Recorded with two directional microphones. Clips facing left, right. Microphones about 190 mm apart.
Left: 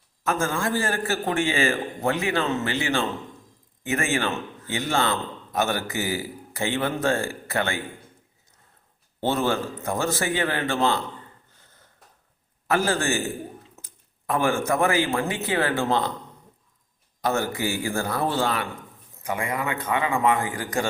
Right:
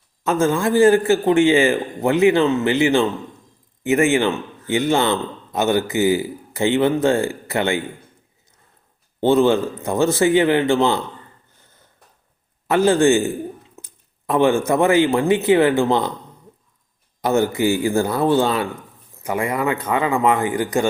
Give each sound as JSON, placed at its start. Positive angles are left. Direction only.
{"t": 0.3, "sound": "a man's voice", "side_deg": -20}
{"t": 9.2, "sound": "a man's voice", "side_deg": -20}
{"t": 12.7, "sound": "a man's voice", "side_deg": -20}
{"t": 17.2, "sound": "a man's voice", "side_deg": -20}